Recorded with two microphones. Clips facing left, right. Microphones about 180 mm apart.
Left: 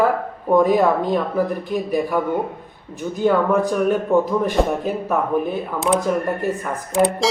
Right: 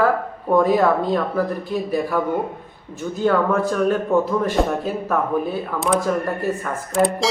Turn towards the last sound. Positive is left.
turn(degrees=15)  # may be behind; listen again after turning